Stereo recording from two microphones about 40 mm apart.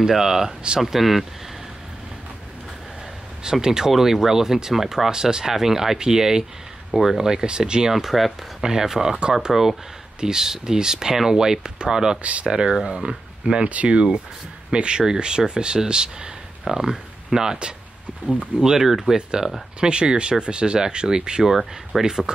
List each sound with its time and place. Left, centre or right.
0.0 s speech: centre
3.6 s speech: centre
7.9 s speech: centre
12.2 s speech: right
12.4 s speech: centre
13.7 s speech: right
21.5 s speech: centre
22.0 s speech: centre